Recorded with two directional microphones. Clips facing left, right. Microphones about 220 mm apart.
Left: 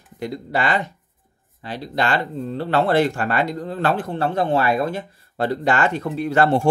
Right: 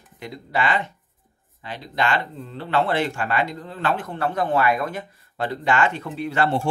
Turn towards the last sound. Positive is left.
turn(degrees=40)  # may be behind; listen again after turning